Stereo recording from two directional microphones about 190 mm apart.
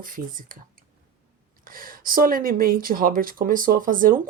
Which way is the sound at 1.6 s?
45° right (ahead or behind).